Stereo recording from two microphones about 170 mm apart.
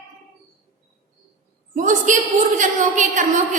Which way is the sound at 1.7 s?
50° right (ahead or behind).